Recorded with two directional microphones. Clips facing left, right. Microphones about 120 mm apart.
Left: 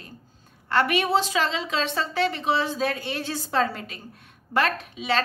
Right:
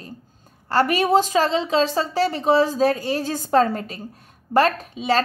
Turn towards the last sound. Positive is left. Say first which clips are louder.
# right 5 dB
turn(degrees=-40)  # may be behind; listen again after turning